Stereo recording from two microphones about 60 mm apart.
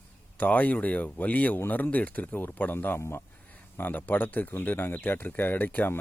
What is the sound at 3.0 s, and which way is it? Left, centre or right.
Speech, left.